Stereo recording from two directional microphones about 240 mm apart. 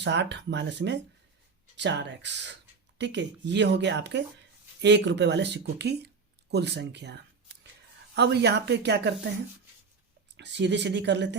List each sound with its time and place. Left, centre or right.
0.0 s speech: right
10.3 s speech: right